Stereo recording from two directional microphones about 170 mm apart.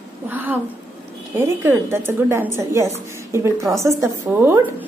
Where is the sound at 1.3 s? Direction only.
15° right (ahead or behind).